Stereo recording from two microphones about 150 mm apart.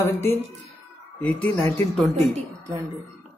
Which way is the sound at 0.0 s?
15° left (ahead or behind).